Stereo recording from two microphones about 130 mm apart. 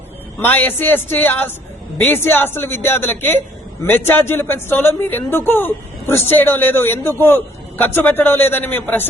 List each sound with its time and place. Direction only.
0.3 s a man's voice: 15° left (ahead or behind)